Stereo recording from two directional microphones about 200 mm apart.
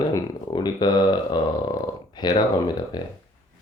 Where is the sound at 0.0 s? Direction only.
20° left (ahead or behind).